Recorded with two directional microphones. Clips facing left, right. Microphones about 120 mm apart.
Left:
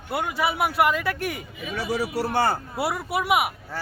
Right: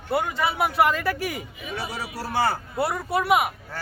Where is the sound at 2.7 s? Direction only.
5° left (ahead or behind).